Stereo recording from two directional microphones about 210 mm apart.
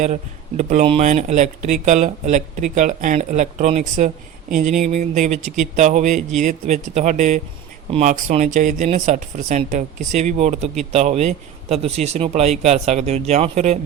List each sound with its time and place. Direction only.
0.0 s speech: 35° right (ahead or behind)